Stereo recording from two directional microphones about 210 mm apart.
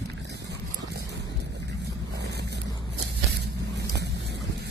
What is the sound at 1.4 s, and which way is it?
Boat, 55° right (ahead or behind).